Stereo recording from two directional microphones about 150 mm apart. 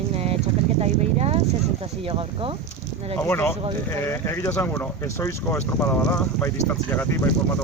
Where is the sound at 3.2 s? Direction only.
15° left (ahead or behind).